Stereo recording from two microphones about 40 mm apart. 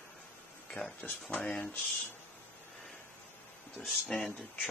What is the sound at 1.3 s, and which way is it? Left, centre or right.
Speech, left.